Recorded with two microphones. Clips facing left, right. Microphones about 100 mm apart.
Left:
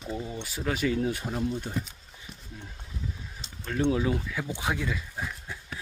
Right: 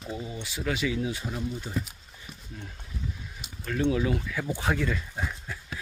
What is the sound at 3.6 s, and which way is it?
Speech, 25° left (ahead or behind).